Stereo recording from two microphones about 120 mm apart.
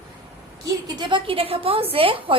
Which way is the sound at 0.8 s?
40° right (ahead or behind).